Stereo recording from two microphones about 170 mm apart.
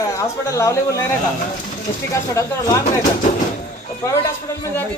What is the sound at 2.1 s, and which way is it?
Speech, 20° left (ahead or behind).